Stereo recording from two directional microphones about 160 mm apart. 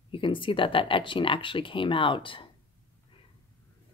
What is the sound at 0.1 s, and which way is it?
Speech, 30° left (ahead or behind).